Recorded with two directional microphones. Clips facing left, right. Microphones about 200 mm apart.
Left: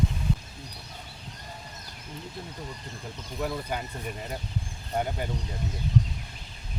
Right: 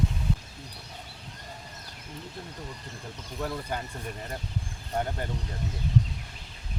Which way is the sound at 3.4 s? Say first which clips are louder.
Left 2 dB; 10° left (ahead or behind).